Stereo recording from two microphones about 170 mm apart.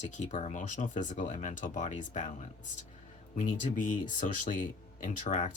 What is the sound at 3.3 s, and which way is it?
Speech, 50° left (ahead or behind).